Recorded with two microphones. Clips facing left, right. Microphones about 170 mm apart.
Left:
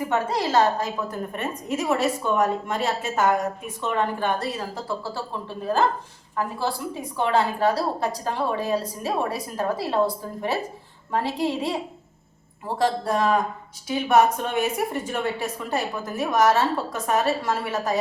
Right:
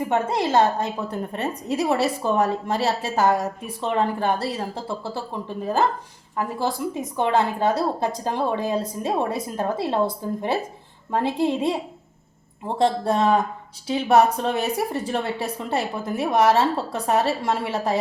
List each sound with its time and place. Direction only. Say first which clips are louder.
0.1 s a woman's voice: right 2 dB; 25° right (ahead or behind)
11.1 s a woman's voice: right 3 dB; 20° right (ahead or behind)